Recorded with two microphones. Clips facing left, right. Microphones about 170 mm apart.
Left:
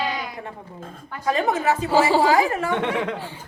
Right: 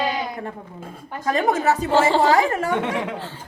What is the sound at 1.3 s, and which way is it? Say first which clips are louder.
Speech: right 2 dB; 40° right (ahead or behind).